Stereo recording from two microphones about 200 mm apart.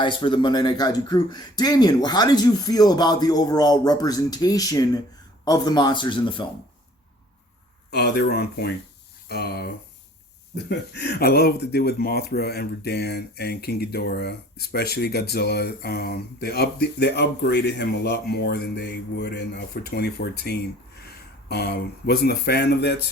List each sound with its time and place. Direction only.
0.0 s speech: 25° left (ahead or behind)
7.9 s speech: 55° left (ahead or behind)